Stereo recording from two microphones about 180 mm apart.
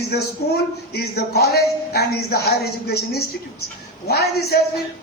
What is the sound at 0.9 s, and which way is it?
A man's voice, 65° left (ahead or behind).